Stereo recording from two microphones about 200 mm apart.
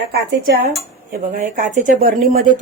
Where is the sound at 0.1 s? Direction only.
50° right (ahead or behind).